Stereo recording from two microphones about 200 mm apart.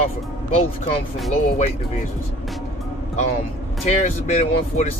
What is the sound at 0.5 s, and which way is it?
Speech, 30° left (ahead or behind).